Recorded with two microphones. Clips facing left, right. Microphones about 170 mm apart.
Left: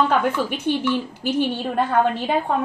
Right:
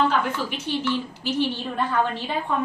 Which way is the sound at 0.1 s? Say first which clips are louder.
Left 5 dB; 55° left (ahead or behind).